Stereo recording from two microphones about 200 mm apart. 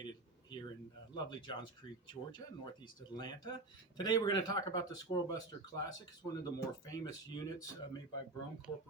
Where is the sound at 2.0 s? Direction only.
20° left (ahead or behind).